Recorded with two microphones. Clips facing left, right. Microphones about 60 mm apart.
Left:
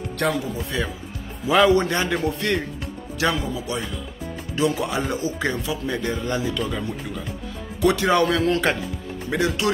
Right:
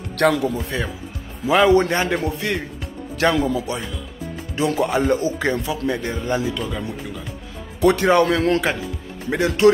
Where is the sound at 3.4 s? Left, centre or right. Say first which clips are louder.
Right 7 dB; right.